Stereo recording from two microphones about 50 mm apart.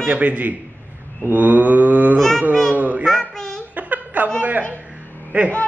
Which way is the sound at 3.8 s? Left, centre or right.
Right.